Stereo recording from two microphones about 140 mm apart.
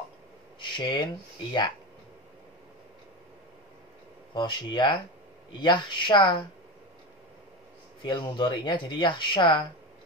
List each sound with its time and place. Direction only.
0.6 s speech: 35° left (ahead or behind)
4.3 s speech: 35° left (ahead or behind)
8.0 s speech: 35° left (ahead or behind)